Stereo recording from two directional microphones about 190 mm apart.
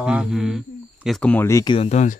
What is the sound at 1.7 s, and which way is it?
Speech, 35° left (ahead or behind).